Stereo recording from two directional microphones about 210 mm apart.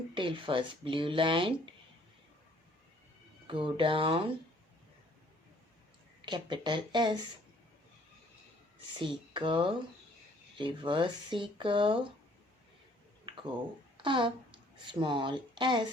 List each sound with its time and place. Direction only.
0.1 s speech: 25° right (ahead or behind)
3.4 s speech: 25° right (ahead or behind)
6.2 s speech: 20° right (ahead or behind)
9.0 s speech: 25° right (ahead or behind)
13.9 s speech: 25° right (ahead or behind)